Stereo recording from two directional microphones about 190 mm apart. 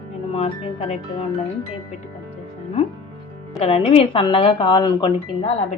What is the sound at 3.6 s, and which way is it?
Speech, 30° left (ahead or behind).